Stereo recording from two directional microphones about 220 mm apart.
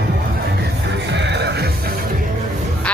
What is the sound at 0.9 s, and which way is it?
Music, 50° right (ahead or behind).